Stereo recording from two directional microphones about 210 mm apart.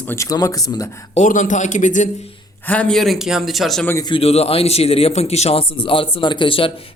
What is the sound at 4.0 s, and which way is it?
A man's voice, 25° left (ahead or behind).